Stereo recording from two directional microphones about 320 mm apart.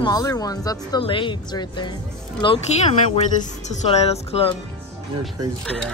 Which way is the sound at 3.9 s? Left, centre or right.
Centre.